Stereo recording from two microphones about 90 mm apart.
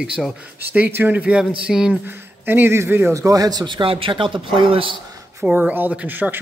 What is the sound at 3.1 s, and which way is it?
A man's voice, 40° right (ahead or behind).